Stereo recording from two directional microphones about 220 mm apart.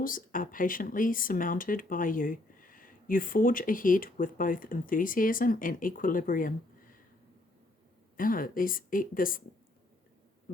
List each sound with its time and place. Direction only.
0.0 s speech: 40° left (ahead or behind)
8.1 s speech: 40° left (ahead or behind)